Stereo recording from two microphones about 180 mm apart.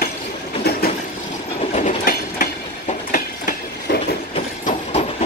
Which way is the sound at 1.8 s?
50° left (ahead or behind).